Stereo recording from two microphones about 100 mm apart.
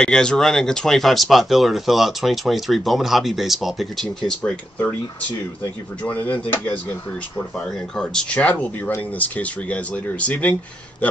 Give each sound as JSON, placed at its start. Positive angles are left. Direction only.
{"t": 0.0, "sound": "speech", "side_deg": 5}
{"t": 4.3, "sound": "speech", "side_deg": 10}